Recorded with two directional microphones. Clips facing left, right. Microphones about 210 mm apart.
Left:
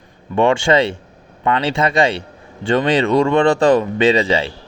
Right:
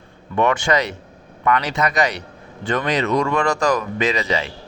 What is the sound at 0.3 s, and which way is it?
Speech, 25° left (ahead or behind).